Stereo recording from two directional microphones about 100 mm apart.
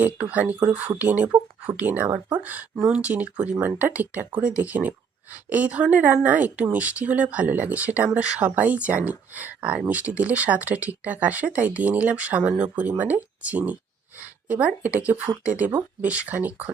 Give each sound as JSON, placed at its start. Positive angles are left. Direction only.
{"t": 0.0, "sound": "speech", "side_deg": -15}